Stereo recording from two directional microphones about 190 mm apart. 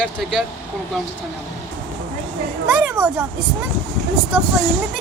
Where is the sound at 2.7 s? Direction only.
5° right (ahead or behind).